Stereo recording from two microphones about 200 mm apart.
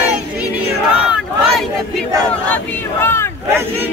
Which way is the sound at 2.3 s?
10° left (ahead or behind).